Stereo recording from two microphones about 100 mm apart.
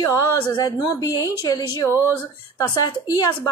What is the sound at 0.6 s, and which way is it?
Speech, 35° left (ahead or behind).